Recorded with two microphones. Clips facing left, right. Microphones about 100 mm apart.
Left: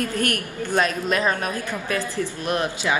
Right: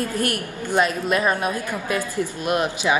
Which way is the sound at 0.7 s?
15° right (ahead or behind).